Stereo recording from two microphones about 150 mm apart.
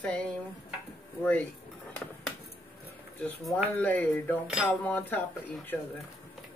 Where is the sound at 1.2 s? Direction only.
10° left (ahead or behind).